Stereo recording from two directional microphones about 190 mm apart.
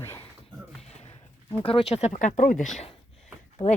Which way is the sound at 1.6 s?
30° left (ahead or behind).